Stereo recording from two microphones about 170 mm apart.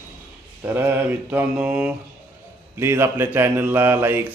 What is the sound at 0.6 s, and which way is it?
A man's voice, 10° right (ahead or behind).